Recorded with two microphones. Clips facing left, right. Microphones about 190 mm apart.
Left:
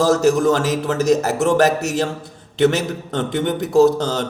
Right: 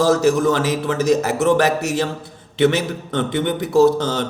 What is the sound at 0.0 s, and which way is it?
A man's voice, 40° left (ahead or behind).